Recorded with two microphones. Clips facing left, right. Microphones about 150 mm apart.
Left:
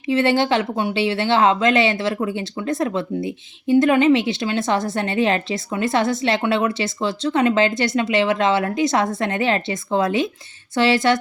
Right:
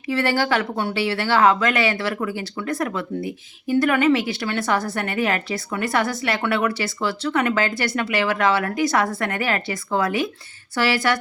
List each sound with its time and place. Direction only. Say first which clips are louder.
0.0 s speech: left 4 dB; 20° left (ahead or behind)